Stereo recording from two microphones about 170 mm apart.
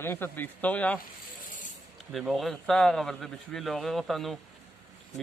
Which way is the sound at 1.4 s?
50° left (ahead or behind).